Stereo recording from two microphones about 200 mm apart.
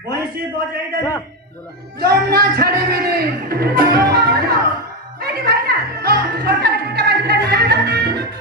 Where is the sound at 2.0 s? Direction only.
50° right (ahead or behind).